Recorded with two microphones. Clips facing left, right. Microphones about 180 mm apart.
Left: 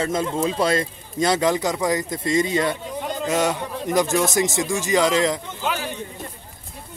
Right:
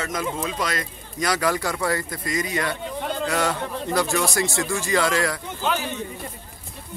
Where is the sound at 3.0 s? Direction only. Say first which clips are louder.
Left 2 dB; 10° left (ahead or behind).